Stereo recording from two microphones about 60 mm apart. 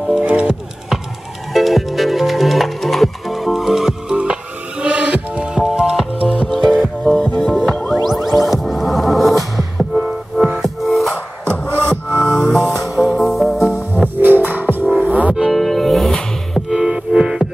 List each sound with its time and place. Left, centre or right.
0.2 s music: right
1.5 s music: centre
11.4 s music: left
11.7 s music: right
12.4 s music: centre
14.2 s music: right
15.3 s music: centre
16.7 s music: centre